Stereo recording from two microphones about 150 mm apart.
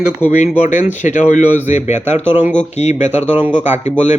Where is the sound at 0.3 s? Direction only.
50° left (ahead or behind).